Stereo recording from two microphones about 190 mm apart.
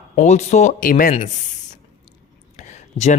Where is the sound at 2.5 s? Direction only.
40° left (ahead or behind).